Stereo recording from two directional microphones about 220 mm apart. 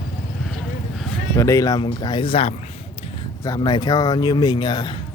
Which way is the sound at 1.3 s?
15° left (ahead or behind).